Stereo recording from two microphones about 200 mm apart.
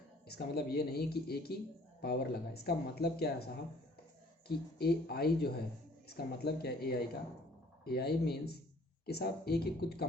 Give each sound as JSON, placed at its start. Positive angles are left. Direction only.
{"t": 0.3, "sound": "speech", "side_deg": 55}